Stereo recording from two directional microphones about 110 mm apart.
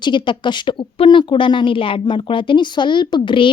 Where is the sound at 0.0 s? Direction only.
45° left (ahead or behind).